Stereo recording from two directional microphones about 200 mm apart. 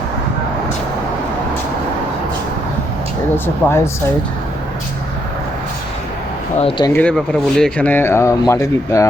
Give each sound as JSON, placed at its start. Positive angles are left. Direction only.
{"t": 3.3, "sound": "speech", "side_deg": 10}
{"t": 6.6, "sound": "speech", "side_deg": 25}
{"t": 6.9, "sound": "speech", "side_deg": 5}